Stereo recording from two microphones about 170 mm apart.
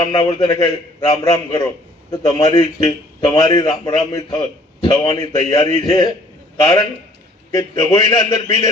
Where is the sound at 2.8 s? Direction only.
25° left (ahead or behind).